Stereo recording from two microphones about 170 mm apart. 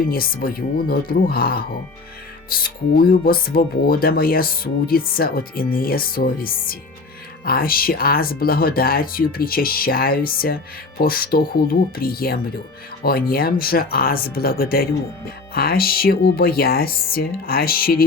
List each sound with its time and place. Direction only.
0.0 s speech: 60° left (ahead or behind)